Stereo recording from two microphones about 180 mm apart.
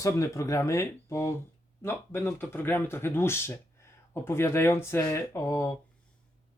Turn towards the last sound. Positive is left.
turn(degrees=15)  # may be behind; listen again after turning